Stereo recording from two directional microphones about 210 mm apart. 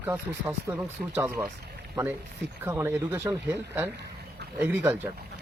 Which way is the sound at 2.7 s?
10° right (ahead or behind).